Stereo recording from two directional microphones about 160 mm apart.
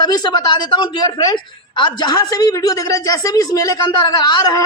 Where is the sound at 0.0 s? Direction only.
25° left (ahead or behind).